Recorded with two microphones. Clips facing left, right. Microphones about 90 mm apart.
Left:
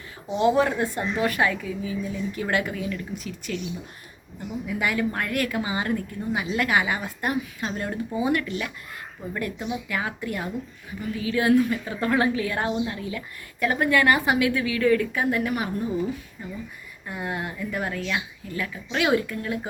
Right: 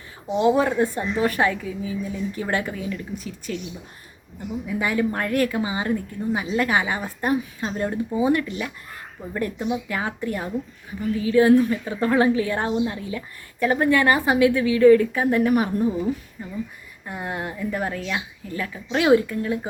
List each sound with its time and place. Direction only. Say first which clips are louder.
0.3 s a woman's voice: right 2 dB; 25° right (ahead or behind)
4.6 s a woman's voice: right 2 dB; 25° right (ahead or behind)
17.1 s speech: right 1 dB; 30° right (ahead or behind)